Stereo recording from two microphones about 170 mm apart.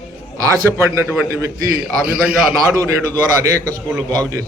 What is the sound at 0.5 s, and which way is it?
A man's voice, 15° right (ahead or behind).